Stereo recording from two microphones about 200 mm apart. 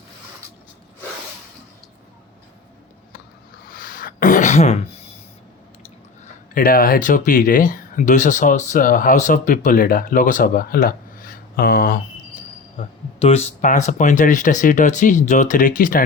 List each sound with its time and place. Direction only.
3.7 s a sound: 45° left (ahead or behind)
6.5 s speech: 45° left (ahead or behind)
12.7 s speech: 30° left (ahead or behind)